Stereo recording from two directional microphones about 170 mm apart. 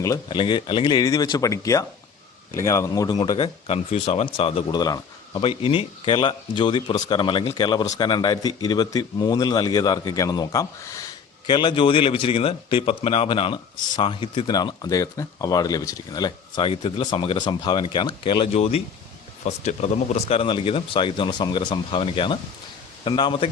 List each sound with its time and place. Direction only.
0.0 s speech: 20° left (ahead or behind)
0.3 s speech: 30° left (ahead or behind)